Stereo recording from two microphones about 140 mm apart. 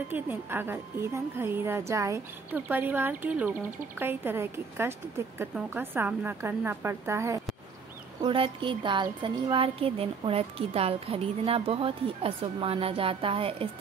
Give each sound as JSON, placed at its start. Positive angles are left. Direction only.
{"t": 0.1, "sound": "a woman's voice", "side_deg": -15}
{"t": 8.2, "sound": "speech", "side_deg": -35}